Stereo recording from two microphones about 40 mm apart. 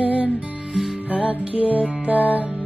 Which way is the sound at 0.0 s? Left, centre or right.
Right.